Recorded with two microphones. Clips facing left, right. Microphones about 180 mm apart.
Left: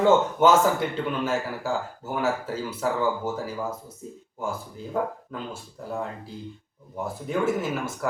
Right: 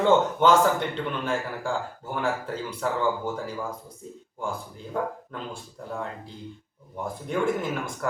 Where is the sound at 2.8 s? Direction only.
5° left (ahead or behind).